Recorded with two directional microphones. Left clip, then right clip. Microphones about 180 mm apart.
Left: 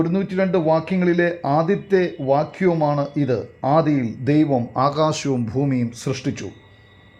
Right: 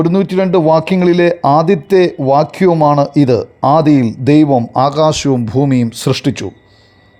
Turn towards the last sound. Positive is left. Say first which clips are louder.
# right 10 dB
turn(degrees=-40)  # may be behind; listen again after turning